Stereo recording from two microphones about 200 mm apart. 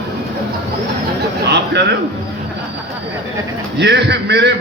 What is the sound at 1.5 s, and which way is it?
Speech, 60° right (ahead or behind).